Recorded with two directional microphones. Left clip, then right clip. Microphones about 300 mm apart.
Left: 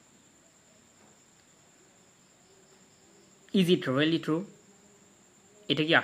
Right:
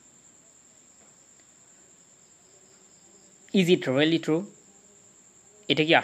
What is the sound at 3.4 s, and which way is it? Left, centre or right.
Speech, centre.